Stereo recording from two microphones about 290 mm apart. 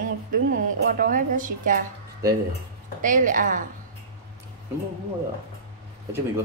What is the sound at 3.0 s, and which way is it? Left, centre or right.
Speech, right.